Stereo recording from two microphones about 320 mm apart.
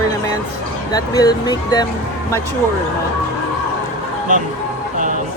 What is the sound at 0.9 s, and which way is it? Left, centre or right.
Speech, centre.